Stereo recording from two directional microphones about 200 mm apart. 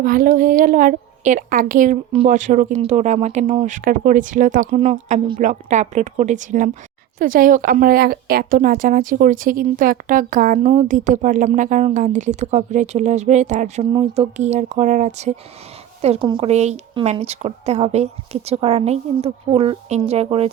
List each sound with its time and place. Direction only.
0.0 s a woman's voice: 45° right (ahead or behind)